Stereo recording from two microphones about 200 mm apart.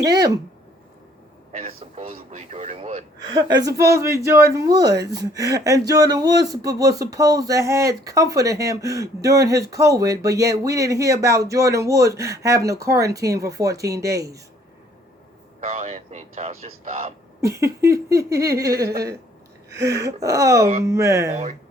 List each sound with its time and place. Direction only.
0.0 s speech: 20° right (ahead or behind)
1.5 s speech: 30° right (ahead or behind)
3.3 s speech: 20° right (ahead or behind)
15.6 s speech: 30° right (ahead or behind)
17.4 s speech: 15° right (ahead or behind)